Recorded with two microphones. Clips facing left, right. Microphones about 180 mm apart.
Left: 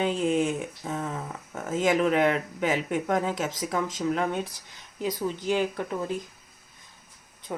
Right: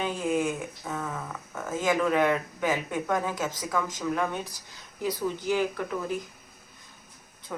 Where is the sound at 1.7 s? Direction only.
20° left (ahead or behind).